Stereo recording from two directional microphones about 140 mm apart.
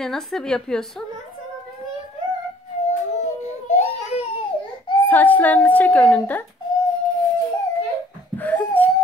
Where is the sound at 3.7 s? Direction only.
50° left (ahead or behind).